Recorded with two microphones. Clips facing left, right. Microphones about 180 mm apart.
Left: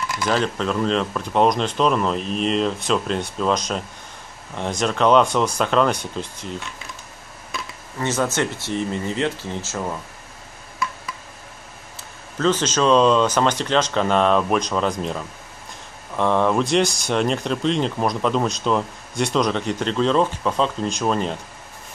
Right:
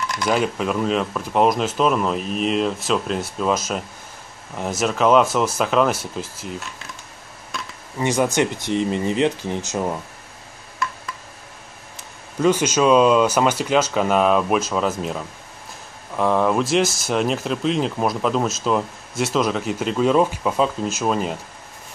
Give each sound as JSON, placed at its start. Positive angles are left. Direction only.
{"t": 0.3, "sound": "speech", "side_deg": -10}
{"t": 7.5, "sound": "a sound", "side_deg": 0}
{"t": 8.0, "sound": "speech", "side_deg": -15}
{"t": 12.0, "sound": "speech", "side_deg": -10}